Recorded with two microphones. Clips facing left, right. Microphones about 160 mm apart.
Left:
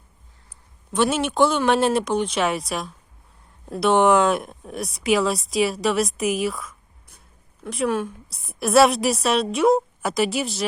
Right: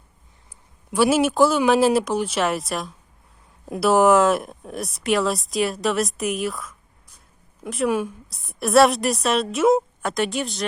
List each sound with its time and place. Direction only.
0.9 s speech: 5° right (ahead or behind)
8.3 s speech: centre (ahead or behind)